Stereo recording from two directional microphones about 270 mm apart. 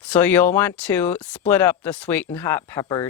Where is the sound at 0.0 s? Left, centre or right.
Centre.